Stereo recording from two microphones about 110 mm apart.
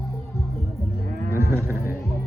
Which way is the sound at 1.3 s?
25° right (ahead or behind).